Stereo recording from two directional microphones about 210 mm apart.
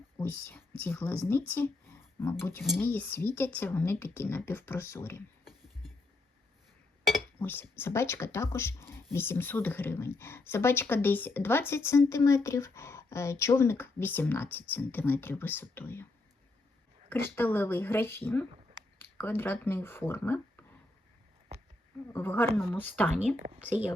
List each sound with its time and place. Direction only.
0.2 s speech: 10° left (ahead or behind)
7.1 s speech: 10° left (ahead or behind)
17.3 s speech: 10° left (ahead or behind)
18.5 s a sound: 20° right (ahead or behind)
18.9 s speech: 10° left (ahead or behind)
22.1 s speech: 10° left (ahead or behind)